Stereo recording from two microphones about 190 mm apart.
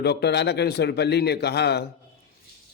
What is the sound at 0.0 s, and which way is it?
A man's voice, 60° left (ahead or behind).